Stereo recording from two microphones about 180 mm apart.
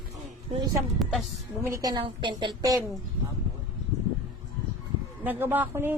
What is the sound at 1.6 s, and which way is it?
A woman's voice, 20° right (ahead or behind).